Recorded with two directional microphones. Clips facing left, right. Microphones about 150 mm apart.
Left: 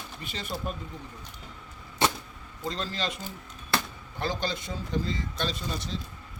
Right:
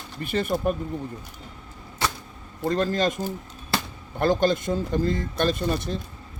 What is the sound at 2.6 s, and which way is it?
Speech, 50° right (ahead or behind).